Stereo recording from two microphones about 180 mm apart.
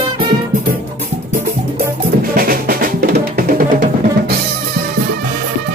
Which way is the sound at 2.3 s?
55° right (ahead or behind).